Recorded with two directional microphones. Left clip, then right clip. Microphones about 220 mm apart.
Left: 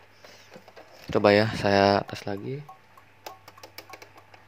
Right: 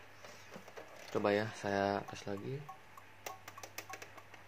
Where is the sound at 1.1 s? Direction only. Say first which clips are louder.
Left 14 dB; 40° left (ahead or behind).